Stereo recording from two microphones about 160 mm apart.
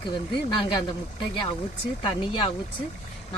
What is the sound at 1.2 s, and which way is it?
Speech, 30° left (ahead or behind).